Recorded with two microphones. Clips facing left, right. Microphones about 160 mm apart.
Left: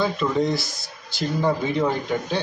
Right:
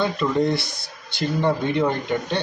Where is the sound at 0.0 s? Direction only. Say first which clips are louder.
Right 1 dB; centre (ahead or behind).